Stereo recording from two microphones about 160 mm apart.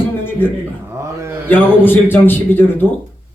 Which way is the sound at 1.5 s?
10° left (ahead or behind).